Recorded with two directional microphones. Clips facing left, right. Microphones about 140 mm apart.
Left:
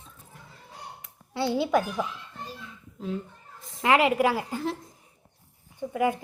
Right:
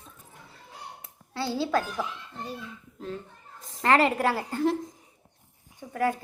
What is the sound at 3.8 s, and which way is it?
Speech, 10° left (ahead or behind).